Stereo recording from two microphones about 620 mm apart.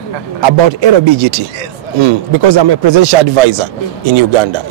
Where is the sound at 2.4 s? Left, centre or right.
Right.